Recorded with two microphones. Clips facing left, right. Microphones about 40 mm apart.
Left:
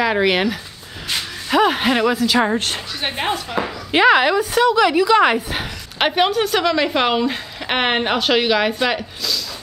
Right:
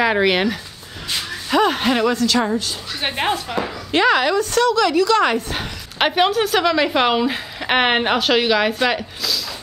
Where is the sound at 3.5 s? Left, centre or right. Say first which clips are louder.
Left 1 dB; centre.